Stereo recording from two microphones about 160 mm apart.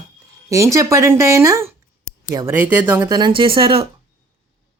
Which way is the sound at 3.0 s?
25° right (ahead or behind).